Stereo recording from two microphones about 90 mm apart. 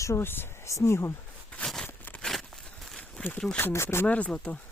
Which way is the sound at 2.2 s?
5° left (ahead or behind).